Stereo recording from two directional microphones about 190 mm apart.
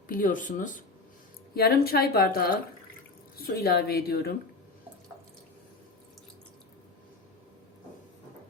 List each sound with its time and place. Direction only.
0.1 s a woman's voice: 45° left (ahead or behind)